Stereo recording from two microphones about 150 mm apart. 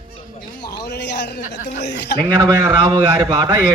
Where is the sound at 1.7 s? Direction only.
90° left.